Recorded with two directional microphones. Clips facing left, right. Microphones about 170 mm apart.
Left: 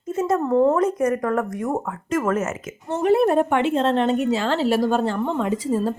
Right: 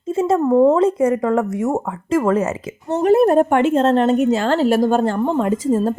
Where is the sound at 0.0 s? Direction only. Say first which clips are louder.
Right 4 dB; 25° right (ahead or behind).